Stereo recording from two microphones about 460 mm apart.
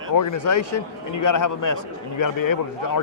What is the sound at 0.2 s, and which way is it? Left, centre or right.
Speech, left.